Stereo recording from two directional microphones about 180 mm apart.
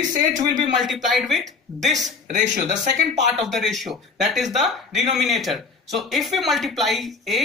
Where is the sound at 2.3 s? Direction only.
45° right (ahead or behind).